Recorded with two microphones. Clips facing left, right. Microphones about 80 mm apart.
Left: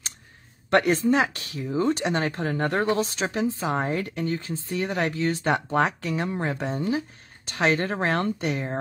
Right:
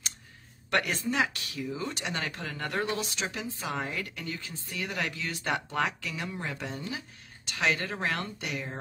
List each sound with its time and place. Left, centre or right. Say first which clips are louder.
0.7 s speech: left 9 dB; left